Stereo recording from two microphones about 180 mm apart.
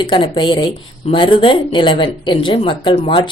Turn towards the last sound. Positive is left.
turn(degrees=30)  # may be behind; listen again after turning